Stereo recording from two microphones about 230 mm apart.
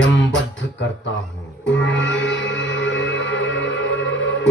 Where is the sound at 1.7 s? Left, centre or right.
Left.